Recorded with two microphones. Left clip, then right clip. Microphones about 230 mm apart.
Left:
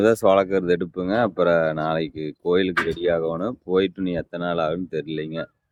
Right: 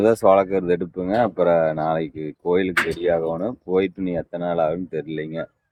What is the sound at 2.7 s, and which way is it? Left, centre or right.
Speech, right.